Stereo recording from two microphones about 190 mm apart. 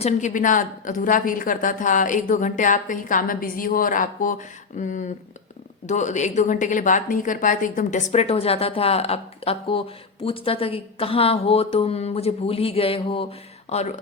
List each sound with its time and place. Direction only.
0.0 s a woman's voice: 40° left (ahead or behind)